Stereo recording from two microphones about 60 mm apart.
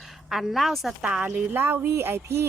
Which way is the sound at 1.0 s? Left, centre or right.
Centre.